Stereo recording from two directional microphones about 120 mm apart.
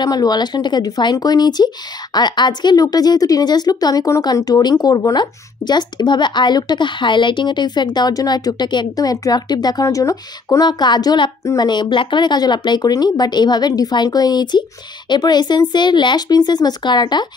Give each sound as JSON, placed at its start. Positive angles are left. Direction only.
{"t": 0.0, "sound": "a woman's voice", "side_deg": 35}